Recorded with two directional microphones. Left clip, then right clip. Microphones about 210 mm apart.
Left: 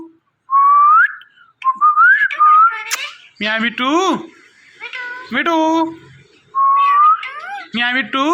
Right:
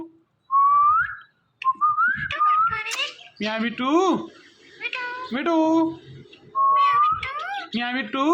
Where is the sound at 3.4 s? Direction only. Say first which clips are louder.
Left 8 dB; 5° left (ahead or behind).